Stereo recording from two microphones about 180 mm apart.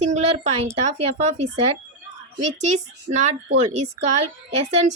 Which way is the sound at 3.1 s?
45° right (ahead or behind).